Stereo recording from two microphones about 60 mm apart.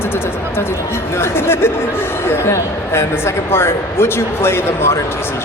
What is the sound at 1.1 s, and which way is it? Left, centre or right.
A woman's voice, left.